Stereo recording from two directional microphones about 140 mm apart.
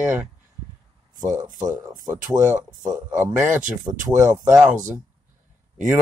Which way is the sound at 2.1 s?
10° right (ahead or behind).